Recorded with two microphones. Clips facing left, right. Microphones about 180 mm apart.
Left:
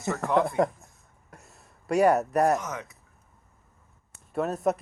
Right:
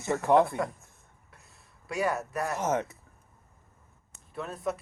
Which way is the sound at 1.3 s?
45° left (ahead or behind).